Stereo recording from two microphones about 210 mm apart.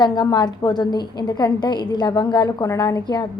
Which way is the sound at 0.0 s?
20° left (ahead or behind).